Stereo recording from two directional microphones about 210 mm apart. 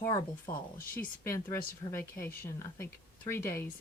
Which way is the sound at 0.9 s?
15° left (ahead or behind).